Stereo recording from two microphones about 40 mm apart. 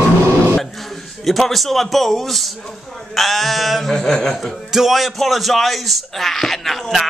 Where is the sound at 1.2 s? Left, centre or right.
Centre.